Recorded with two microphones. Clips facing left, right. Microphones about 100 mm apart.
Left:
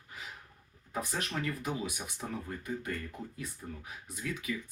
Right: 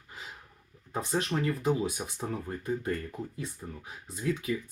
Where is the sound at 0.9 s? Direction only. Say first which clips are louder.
Right 5 dB; 30° right (ahead or behind).